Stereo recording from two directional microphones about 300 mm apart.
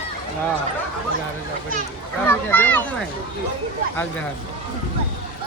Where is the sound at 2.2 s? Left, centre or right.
Centre.